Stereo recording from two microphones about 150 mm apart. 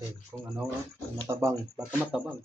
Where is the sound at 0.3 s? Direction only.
10° right (ahead or behind).